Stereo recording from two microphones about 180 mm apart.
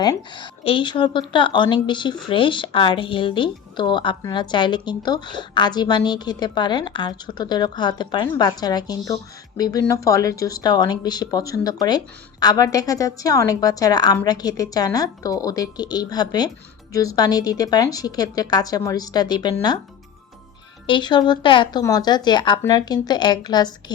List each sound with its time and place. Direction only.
0.0 s speech: 25° left (ahead or behind)
20.8 s speech: 25° left (ahead or behind)